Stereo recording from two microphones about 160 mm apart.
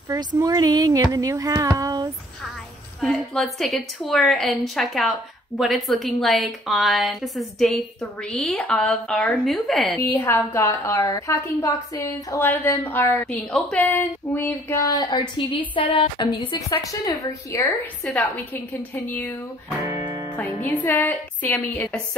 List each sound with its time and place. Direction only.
0.4 s speech: 25° right (ahead or behind)
3.0 s a woman's voice: centre (ahead or behind)
9.9 s a woman's voice: 15° left (ahead or behind)
14.8 s a woman's voice: 20° left (ahead or behind)
18.0 s a woman's voice: 10° left (ahead or behind)
19.8 s music: 20° right (ahead or behind)
20.3 s a woman's voice: 10° left (ahead or behind)